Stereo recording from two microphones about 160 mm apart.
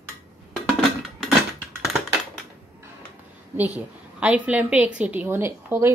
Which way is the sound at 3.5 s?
10° right (ahead or behind).